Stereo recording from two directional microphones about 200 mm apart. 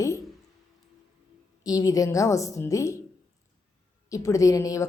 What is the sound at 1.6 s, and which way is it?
A woman's voice, 15° left (ahead or behind).